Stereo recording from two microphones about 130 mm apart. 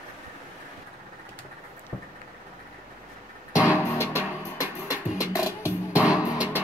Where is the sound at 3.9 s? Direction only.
20° left (ahead or behind).